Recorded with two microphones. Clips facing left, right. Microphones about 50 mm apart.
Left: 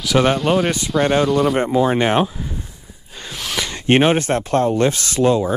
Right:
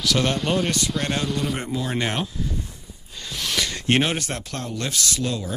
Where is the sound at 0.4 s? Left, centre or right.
Centre.